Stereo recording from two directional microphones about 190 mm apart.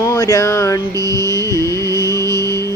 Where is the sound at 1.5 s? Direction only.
15° right (ahead or behind).